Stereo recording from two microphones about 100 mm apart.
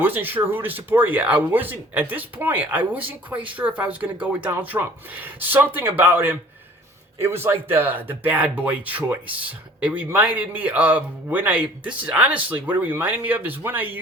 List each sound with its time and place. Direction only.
0.0 s speech: 20° right (ahead or behind)